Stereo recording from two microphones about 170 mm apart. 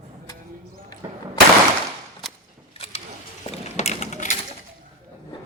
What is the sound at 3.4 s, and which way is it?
Mechanisms, 40° left (ahead or behind).